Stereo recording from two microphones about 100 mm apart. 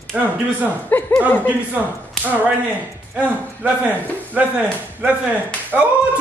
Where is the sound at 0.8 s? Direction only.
20° left (ahead or behind).